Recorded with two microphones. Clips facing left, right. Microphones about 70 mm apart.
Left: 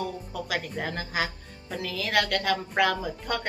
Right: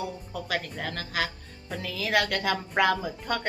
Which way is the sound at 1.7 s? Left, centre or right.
Centre.